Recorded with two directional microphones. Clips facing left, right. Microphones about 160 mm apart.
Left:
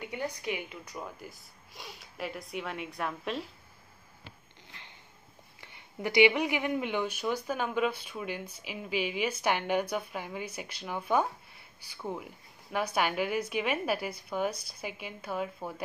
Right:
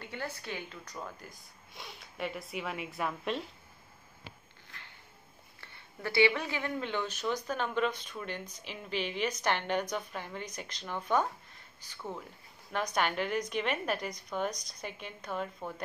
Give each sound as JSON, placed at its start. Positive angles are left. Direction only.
{"t": 0.0, "sound": "speech", "side_deg": 15}
{"t": 4.6, "sound": "a sound", "side_deg": 20}
{"t": 5.6, "sound": "speech", "side_deg": 15}